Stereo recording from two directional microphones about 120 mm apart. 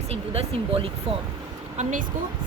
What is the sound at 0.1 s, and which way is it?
Speech, 55° right (ahead or behind).